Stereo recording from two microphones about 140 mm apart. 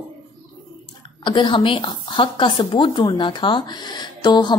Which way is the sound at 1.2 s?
35° left (ahead or behind).